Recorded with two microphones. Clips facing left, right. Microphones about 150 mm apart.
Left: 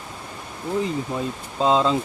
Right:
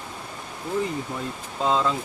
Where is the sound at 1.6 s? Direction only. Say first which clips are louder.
Left 4 dB; 20° left (ahead or behind).